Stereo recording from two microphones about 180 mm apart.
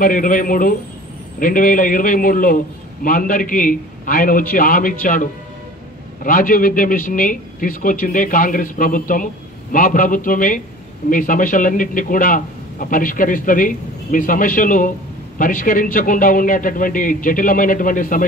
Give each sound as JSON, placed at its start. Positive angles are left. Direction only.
{"t": 0.0, "sound": "a man's voice", "side_deg": 50}